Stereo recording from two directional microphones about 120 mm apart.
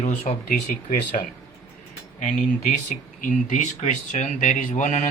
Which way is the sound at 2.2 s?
90° left.